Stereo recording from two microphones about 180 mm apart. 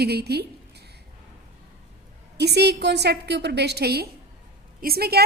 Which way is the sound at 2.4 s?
65° right (ahead or behind).